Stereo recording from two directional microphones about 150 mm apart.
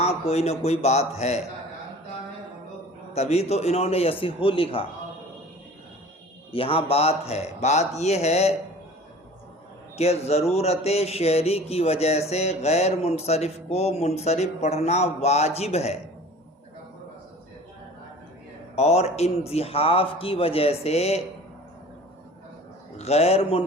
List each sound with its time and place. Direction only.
0.0 s speech: 45° left (ahead or behind)
3.2 s speech: 45° left (ahead or behind)
6.5 s speech: 40° left (ahead or behind)
10.0 s speech: 45° left (ahead or behind)
18.8 s speech: 45° left (ahead or behind)
23.0 s speech: 45° left (ahead or behind)